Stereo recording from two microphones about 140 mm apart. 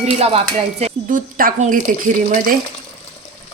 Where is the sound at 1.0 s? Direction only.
80° right.